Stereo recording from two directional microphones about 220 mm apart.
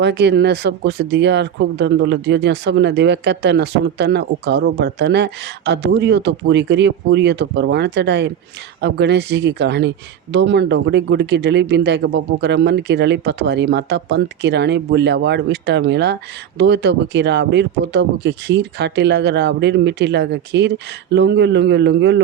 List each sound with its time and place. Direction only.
0.0 s speech: 50° right (ahead or behind)